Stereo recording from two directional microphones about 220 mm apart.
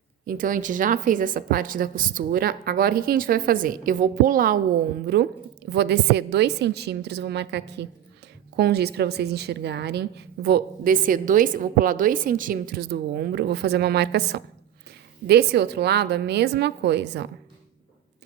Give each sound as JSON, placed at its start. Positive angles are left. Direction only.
{"t": 0.3, "sound": "a woman's voice", "side_deg": -40}